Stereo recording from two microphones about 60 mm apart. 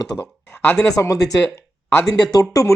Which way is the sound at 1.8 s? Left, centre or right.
Left.